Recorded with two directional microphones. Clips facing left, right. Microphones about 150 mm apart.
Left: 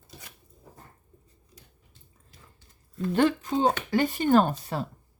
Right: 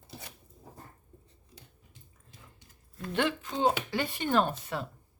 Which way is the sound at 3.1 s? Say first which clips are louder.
Left 6 dB; 40° left (ahead or behind).